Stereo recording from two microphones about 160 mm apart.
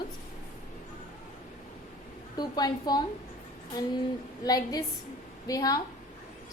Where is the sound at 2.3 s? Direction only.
25° left (ahead or behind).